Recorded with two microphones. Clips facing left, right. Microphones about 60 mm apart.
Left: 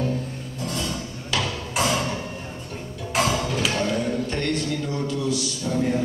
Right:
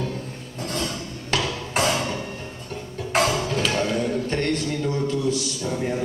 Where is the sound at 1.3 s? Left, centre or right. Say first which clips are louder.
Right 2 dB; right.